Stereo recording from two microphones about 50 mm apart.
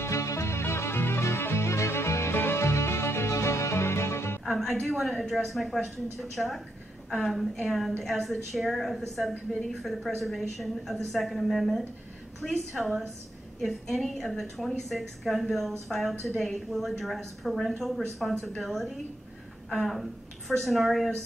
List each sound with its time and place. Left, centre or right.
0.0 s music: left
2.3 s music: left
4.5 s a woman's voice: centre